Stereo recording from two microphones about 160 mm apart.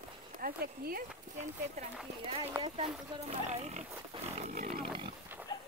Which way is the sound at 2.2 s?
35° right (ahead or behind).